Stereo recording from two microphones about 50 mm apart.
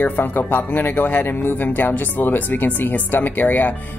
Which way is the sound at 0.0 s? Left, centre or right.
Left.